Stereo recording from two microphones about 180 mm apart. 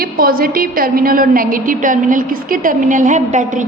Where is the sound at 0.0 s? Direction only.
55° right (ahead or behind).